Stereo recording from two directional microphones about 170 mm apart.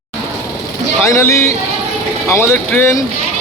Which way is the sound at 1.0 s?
15° left (ahead or behind).